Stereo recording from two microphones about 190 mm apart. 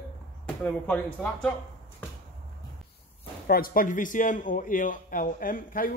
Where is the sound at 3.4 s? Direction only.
50° left (ahead or behind).